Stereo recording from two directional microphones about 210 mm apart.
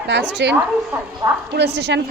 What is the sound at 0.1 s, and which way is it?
Speech, 60° right (ahead or behind).